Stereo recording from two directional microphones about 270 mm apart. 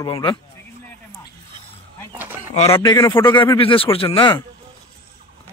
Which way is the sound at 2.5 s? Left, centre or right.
Left.